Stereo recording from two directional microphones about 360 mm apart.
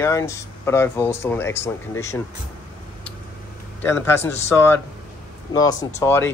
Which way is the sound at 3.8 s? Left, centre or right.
Centre.